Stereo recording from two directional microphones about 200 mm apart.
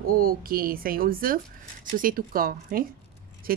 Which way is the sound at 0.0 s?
45° right (ahead or behind).